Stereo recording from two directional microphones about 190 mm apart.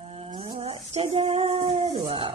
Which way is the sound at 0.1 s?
30° right (ahead or behind).